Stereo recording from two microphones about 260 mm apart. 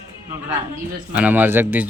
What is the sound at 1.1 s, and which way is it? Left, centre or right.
Speech, centre.